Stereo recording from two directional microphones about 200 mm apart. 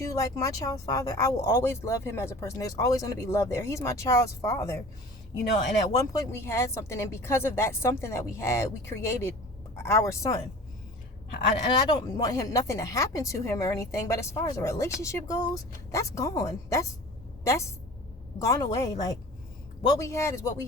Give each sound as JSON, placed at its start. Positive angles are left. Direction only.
{"t": 0.0, "sound": "speech", "side_deg": 15}
{"t": 5.9, "sound": "speech", "side_deg": 15}
{"t": 11.9, "sound": "a woman's voice", "side_deg": 20}